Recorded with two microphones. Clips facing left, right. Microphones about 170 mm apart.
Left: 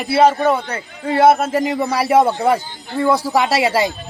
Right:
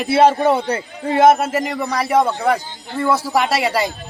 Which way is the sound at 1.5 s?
Centre (ahead or behind).